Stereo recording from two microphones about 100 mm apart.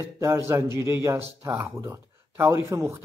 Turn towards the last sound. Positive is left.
turn(degrees=-25)  # may be behind; listen again after turning